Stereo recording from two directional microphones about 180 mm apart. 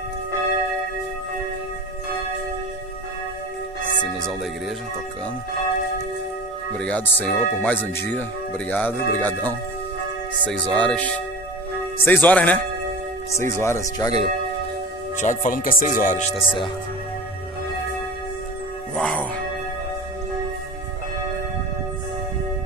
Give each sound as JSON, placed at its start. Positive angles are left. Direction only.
{"t": 4.0, "sound": "speech", "side_deg": 5}
{"t": 6.8, "sound": "speech", "side_deg": 10}
{"t": 15.1, "sound": "speech", "side_deg": 45}
{"t": 16.3, "sound": "speech", "side_deg": 30}
{"t": 18.9, "sound": "speech", "side_deg": 5}